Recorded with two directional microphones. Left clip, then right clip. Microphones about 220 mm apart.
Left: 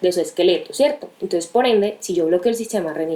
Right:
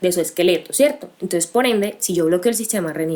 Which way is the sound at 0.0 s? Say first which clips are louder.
Even; 50° right (ahead or behind).